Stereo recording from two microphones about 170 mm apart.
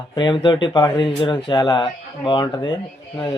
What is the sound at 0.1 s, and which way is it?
Speech, 25° left (ahead or behind).